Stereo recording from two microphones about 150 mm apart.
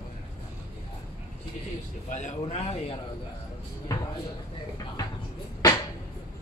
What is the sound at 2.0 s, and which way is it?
Speech, 50° left (ahead or behind).